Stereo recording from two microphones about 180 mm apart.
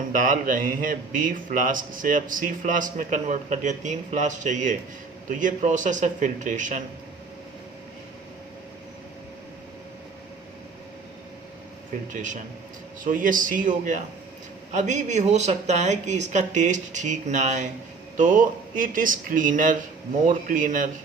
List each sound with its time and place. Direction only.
0.1 s speech: 50° right (ahead or behind)
12.1 s speech: 45° right (ahead or behind)